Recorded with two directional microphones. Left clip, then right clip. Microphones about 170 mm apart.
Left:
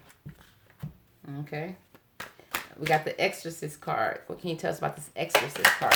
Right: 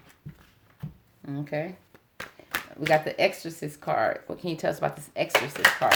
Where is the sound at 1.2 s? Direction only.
40° right (ahead or behind).